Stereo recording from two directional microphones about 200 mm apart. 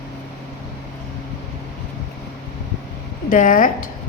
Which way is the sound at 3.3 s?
40° left (ahead or behind).